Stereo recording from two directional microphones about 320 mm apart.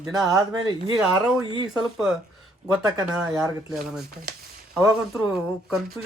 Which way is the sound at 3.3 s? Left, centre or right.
Centre.